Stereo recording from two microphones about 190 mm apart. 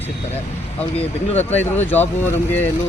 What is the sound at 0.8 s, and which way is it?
Speech, 10° left (ahead or behind).